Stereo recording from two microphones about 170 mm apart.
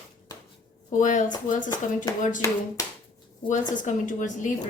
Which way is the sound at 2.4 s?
20° left (ahead or behind).